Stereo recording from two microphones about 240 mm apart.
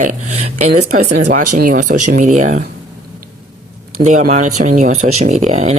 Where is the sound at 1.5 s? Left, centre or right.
Right.